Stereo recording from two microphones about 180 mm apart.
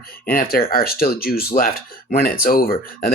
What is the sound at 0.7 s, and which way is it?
Speech, 60° left (ahead or behind).